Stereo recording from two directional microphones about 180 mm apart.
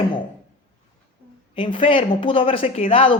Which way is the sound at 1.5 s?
30° left (ahead or behind).